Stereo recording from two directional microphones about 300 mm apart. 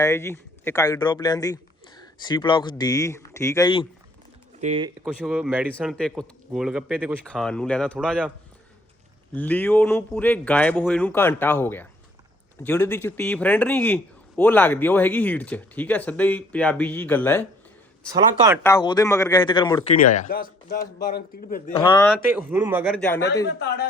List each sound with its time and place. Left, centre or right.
0.0 s a man's voice: centre
4.6 s speech: right
5.0 s speech: centre
9.3 s speech: centre
18.1 s speech: centre
18.6 s a man's voice: centre; by 21.6 s left
21.8 s a man's voice: centre
22.4 s speech: centre
23.5 s a man's voice: left